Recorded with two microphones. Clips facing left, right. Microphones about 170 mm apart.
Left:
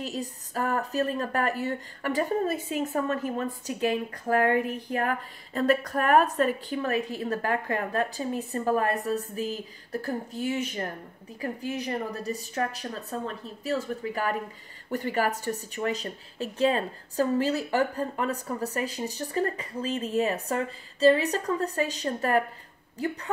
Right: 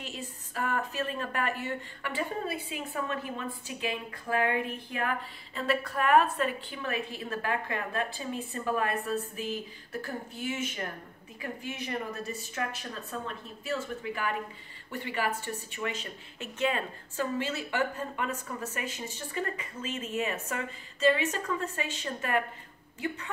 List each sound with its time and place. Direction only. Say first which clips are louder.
0.0 s speech: left 7 dB; 40° left (ahead or behind)